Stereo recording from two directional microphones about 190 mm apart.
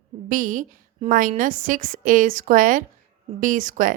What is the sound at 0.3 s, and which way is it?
A woman's voice, 45° right (ahead or behind).